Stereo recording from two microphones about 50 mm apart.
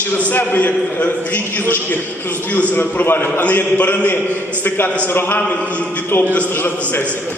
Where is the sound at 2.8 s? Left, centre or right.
Left.